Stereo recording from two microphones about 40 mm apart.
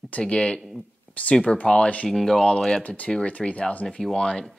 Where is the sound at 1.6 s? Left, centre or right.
Left.